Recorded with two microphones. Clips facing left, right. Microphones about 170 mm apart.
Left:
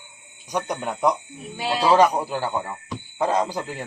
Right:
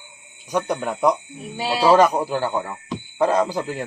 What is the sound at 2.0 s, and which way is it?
Speech, 45° right (ahead or behind).